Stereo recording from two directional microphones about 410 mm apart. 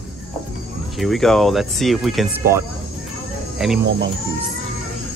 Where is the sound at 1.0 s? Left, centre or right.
Centre.